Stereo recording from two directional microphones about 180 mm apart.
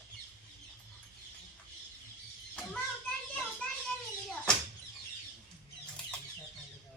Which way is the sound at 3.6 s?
5° left (ahead or behind).